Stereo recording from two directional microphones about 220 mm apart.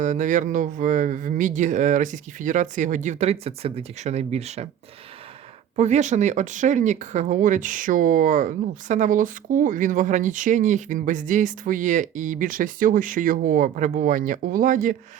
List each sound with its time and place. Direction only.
0.0 s speech: 35° right (ahead or behind)
5.7 s speech: 30° right (ahead or behind)